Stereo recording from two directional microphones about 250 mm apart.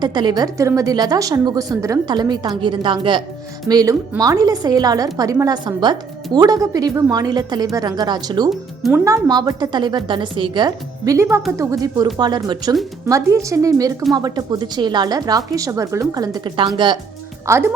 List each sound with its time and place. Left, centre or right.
0.0 s speech: centre
8.4 s speech: centre
9.0 s speech: centre